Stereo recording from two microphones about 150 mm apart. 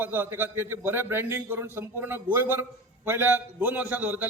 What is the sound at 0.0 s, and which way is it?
A man's voice, 15° right (ahead or behind).